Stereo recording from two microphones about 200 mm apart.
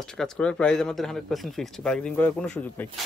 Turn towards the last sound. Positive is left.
turn(degrees=5)  # may be behind; listen again after turning